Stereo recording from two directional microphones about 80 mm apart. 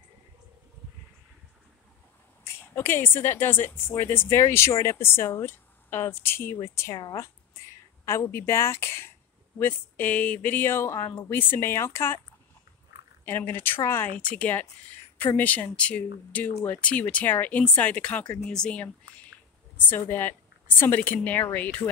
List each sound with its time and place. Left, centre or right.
2.4 s a woman's voice: left
8.0 s a woman's voice: left
13.2 s speech: left
14.1 s speech: centre
19.9 s speech: left